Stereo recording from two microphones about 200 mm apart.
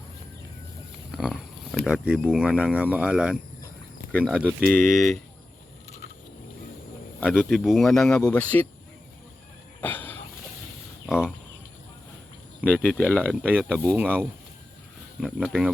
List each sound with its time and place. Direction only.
1.1 s pig: centre (ahead or behind)
1.8 s speech: centre (ahead or behind)
7.3 s speech: centre (ahead or behind)
9.8 s dog: 10° left (ahead or behind)
11.0 s speech: centre (ahead or behind)
12.6 s speech: 5° right (ahead or behind)
13.0 s speech: 5° left (ahead or behind)
13.8 s speech: 10° right (ahead or behind)
15.2 s speech: centre (ahead or behind)